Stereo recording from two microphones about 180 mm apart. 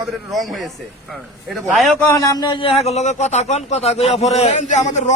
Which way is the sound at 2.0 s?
20° left (ahead or behind).